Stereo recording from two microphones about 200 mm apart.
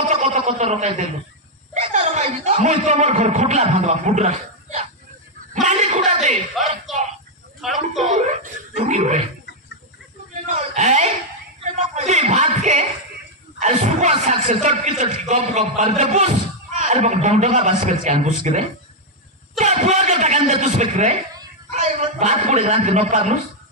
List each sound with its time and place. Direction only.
0.1 s a sound: 35° right (ahead or behind)
1.7 s speech: 30° right (ahead or behind)
5.5 s a sound: 35° right (ahead or behind)
6.6 s speech: centre (ahead or behind)
8.0 s speech: 35° right (ahead or behind)
10.5 s a man's voice: 30° right (ahead or behind)